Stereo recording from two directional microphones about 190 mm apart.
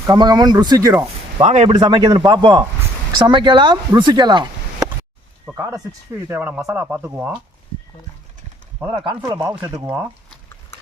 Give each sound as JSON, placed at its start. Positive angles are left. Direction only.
{"t": 0.1, "sound": "a man's voice", "side_deg": -20}
{"t": 1.4, "sound": "a man's voice", "side_deg": -35}
{"t": 1.7, "sound": "a man's voice", "side_deg": -25}
{"t": 8.9, "sound": "speech", "side_deg": -25}